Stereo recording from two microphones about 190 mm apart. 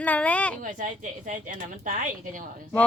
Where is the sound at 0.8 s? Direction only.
45° right (ahead or behind).